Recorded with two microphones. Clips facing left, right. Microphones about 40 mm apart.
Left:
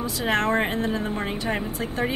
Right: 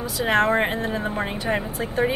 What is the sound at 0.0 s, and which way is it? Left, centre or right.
A woman's voice, centre.